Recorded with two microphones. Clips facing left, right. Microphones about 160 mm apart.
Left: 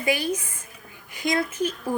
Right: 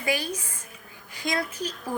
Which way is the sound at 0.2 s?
20° left (ahead or behind).